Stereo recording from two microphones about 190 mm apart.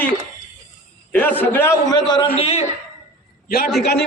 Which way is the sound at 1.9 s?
25° left (ahead or behind).